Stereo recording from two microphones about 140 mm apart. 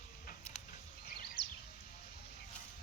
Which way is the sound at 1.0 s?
90° left.